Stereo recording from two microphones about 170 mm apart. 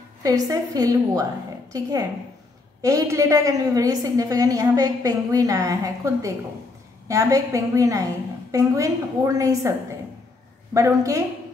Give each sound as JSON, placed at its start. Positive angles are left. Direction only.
{"t": 0.2, "sound": "a woman's voice", "side_deg": -20}
{"t": 10.7, "sound": "a woman's voice", "side_deg": -20}